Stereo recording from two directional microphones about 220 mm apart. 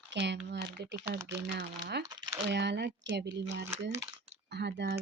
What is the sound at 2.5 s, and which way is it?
A woman's voice, 50° right (ahead or behind).